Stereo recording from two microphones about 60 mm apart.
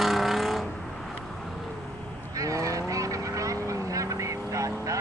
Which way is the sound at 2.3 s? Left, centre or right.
Right.